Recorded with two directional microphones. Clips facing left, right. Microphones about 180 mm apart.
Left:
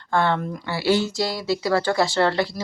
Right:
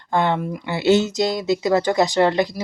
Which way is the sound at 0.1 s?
15° right (ahead or behind).